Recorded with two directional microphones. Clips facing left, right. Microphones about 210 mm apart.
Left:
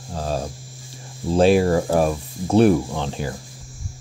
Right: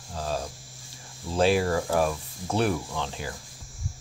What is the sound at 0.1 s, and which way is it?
Hum, 40° left (ahead or behind).